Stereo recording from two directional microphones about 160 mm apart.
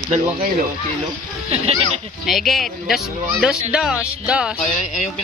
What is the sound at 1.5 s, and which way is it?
Speech, 40° right (ahead or behind).